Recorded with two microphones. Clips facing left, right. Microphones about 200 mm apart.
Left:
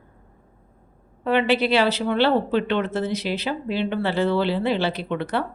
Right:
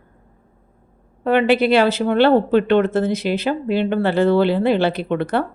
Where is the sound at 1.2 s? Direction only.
50° right (ahead or behind).